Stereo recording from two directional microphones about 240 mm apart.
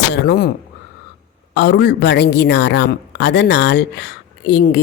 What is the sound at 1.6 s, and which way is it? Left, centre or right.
A woman's voice, left.